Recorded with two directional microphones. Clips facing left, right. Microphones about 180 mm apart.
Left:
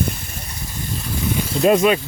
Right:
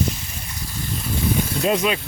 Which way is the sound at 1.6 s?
55° left (ahead or behind).